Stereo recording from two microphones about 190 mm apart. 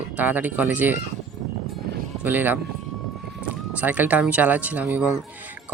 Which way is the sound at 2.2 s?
10° right (ahead or behind).